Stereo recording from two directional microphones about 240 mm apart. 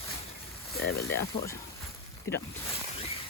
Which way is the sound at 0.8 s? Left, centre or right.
Left.